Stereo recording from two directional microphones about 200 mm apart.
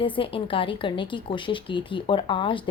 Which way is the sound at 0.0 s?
25° left (ahead or behind).